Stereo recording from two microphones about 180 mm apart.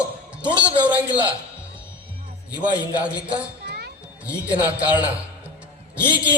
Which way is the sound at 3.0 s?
5° right (ahead or behind).